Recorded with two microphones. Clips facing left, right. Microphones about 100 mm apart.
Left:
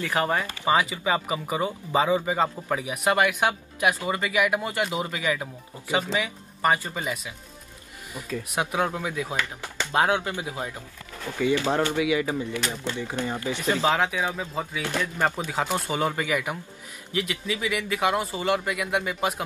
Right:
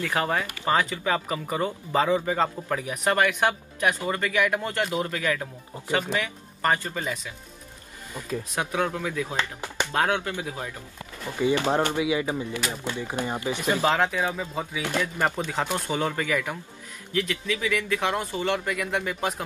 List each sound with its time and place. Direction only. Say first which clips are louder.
0.0 s speech: left 1 dB; 5° left (ahead or behind)
8.5 s speech: left 2 dB; 20° left (ahead or behind)
9.4 s speech: right 2 dB; 20° right (ahead or behind)
9.9 s speech: left 3 dB; 20° left (ahead or behind)
11.3 s speech: even; 20° right (ahead or behind)
12.5 s speech: left 1 dB; 10° right (ahead or behind)
13.8 s speech: right 1 dB; 10° left (ahead or behind)
14.8 s speech: right 2 dB; 15° right (ahead or behind)
15.3 s speech: left 1 dB; 5° left (ahead or behind)